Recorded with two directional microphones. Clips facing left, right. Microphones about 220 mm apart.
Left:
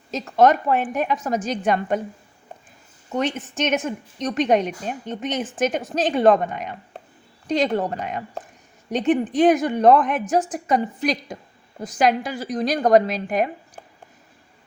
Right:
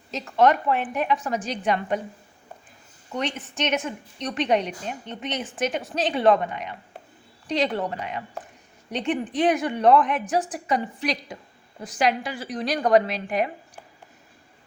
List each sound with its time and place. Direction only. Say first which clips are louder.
0.1 s a woman's voice: left 3 dB; 45° left (ahead or behind)
3.1 s a woman's voice: left 5 dB; 45° left (ahead or behind)